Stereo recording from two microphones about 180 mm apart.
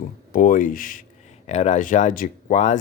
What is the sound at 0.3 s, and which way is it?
Speech, 50° left (ahead or behind).